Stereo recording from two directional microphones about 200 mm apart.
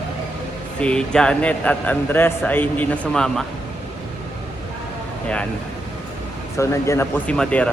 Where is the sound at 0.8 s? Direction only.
5° left (ahead or behind).